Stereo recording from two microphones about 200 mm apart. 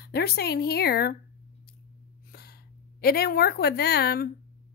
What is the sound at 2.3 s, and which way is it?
A woman's voice, 50° left (ahead or behind).